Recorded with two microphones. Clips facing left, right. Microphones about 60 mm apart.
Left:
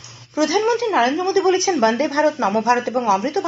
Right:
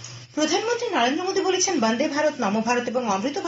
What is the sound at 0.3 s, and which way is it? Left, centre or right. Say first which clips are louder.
Speech: left 5 dB; left.